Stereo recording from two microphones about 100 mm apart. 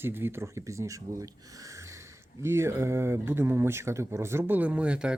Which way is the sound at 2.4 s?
25° right (ahead or behind).